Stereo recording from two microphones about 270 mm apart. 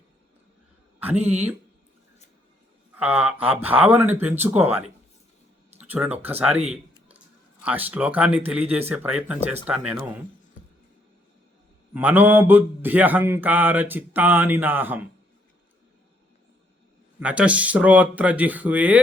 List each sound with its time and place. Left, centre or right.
1.1 s speech: right
2.9 s speech: centre
5.8 s speech: centre
7.6 s speech: centre
11.9 s speech: centre
17.2 s speech: centre